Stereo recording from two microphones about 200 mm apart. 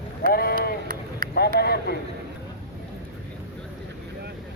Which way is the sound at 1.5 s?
50° left (ahead or behind).